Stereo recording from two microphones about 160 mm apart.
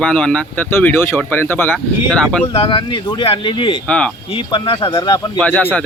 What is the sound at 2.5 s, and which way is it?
Speech, 35° left (ahead or behind).